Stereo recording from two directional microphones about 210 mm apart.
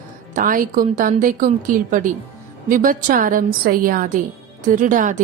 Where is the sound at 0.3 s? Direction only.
40° right (ahead or behind).